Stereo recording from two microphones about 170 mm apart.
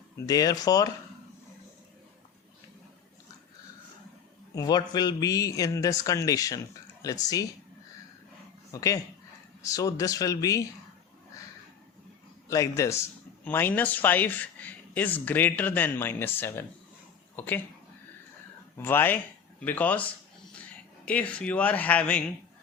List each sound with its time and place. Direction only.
0.3 s speech: 20° left (ahead or behind)
4.5 s speech: 25° left (ahead or behind)
8.7 s speech: 20° left (ahead or behind)
12.5 s speech: 20° left (ahead or behind)
18.8 s speech: 10° left (ahead or behind)